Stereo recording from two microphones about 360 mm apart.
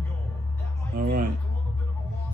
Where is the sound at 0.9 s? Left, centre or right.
Right.